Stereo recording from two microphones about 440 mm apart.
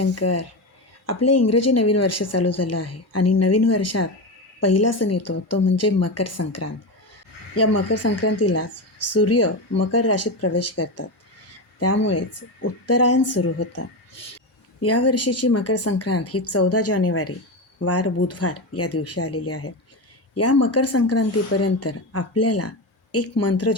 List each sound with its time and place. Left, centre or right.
0.0 s a woman's voice: left